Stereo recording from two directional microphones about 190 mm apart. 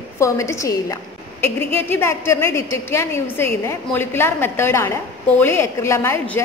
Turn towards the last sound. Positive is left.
turn(degrees=10)  # may be behind; listen again after turning